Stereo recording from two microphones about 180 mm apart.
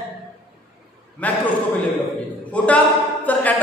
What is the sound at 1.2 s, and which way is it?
Speech, 10° left (ahead or behind).